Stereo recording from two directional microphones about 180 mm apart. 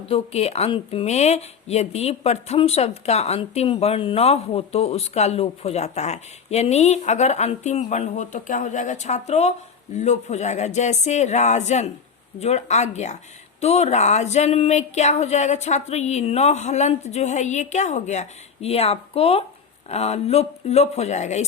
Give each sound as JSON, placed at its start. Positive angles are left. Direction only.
{"t": 0.1, "sound": "speech", "side_deg": 35}